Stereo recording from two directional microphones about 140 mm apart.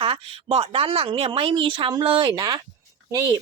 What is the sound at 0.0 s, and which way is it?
Speech, 40° right (ahead or behind).